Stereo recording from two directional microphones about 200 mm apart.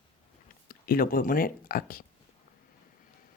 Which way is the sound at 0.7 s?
45° left (ahead or behind).